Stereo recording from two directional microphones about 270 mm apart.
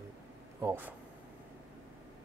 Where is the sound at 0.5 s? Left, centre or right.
Centre.